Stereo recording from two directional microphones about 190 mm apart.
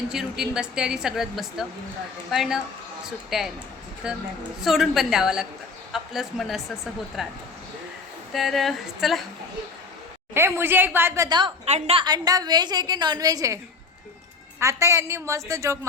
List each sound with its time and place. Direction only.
0.1 s a woman's voice: centre (ahead or behind)
10.3 s a woman's voice: 10° right (ahead or behind)
14.6 s a woman's voice: 15° right (ahead or behind)